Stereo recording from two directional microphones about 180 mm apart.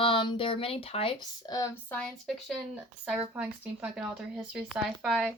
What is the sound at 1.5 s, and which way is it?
Speech, 15° left (ahead or behind).